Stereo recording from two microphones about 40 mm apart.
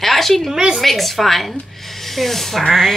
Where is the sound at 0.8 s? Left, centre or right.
Centre.